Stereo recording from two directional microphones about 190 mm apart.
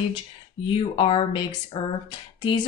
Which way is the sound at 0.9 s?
30° left (ahead or behind).